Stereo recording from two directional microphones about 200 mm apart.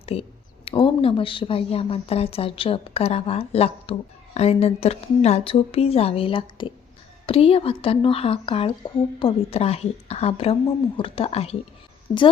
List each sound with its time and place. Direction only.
0.0 s a woman's voice: 30° left (ahead or behind)